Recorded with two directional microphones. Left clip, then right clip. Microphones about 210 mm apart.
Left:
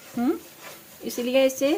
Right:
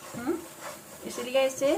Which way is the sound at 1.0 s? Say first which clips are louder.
Left 5 dB; 55° left (ahead or behind).